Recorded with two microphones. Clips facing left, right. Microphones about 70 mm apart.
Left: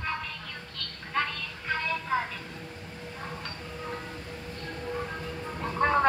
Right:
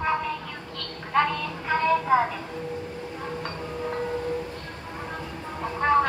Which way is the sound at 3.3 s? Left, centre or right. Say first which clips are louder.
Right 7 dB; right.